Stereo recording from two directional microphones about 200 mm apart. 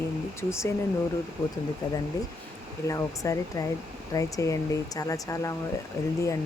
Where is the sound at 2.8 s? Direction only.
15° left (ahead or behind).